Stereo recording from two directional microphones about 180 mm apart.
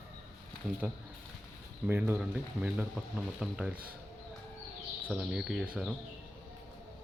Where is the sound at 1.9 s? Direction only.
10° right (ahead or behind).